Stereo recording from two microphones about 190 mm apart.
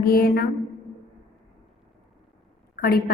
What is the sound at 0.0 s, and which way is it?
Speech, 55° left (ahead or behind).